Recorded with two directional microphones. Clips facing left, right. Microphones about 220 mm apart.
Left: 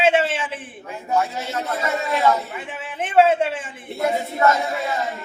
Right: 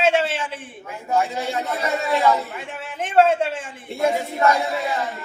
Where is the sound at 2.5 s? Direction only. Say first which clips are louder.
Left 1 dB; centre (ahead or behind).